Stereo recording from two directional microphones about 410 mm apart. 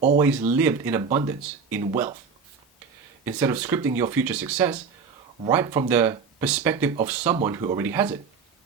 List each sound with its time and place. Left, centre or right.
0.2 s speech: centre
3.2 s speech: centre